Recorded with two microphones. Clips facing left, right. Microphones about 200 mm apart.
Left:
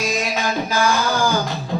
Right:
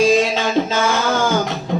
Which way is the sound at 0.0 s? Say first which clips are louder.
Right 8 dB; 30° right (ahead or behind).